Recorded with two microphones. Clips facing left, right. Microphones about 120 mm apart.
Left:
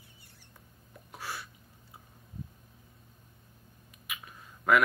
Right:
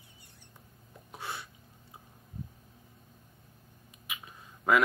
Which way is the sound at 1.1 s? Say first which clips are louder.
Even; 25° right (ahead or behind).